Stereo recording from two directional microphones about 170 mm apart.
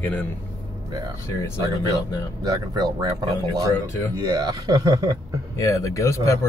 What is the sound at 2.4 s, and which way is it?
Speech, 20° right (ahead or behind).